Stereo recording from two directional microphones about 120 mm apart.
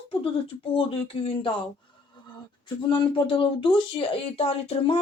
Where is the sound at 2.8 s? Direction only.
40° left (ahead or behind).